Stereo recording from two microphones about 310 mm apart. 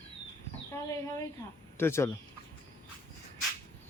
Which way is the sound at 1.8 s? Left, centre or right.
Centre.